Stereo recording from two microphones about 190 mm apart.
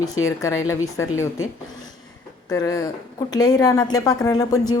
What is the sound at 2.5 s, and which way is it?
Speech, 20° left (ahead or behind).